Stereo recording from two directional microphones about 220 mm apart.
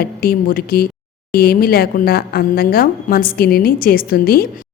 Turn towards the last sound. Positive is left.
turn(degrees=45)  # may be behind; listen again after turning